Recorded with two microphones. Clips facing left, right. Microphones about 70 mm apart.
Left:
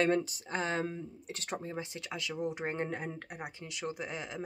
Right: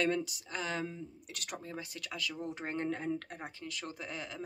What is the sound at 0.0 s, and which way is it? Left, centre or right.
Speech, left.